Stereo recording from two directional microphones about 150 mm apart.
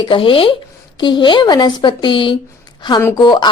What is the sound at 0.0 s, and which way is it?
Speech, 35° left (ahead or behind).